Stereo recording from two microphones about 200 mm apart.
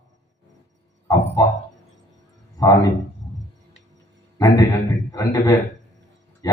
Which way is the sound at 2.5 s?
15° left (ahead or behind).